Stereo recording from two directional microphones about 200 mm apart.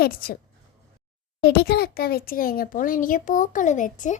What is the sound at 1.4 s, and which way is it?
A child's voice, 50° left (ahead or behind).